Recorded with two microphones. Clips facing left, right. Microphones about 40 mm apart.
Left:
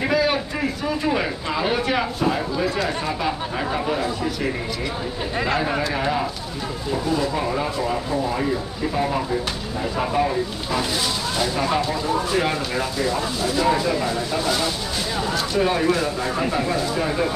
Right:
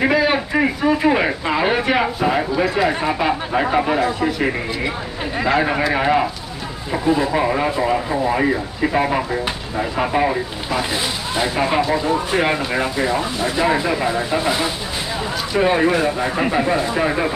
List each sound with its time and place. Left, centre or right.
0.1 s a sound: centre
0.6 s speech: right
5.6 s speech: right
11.3 s speech: right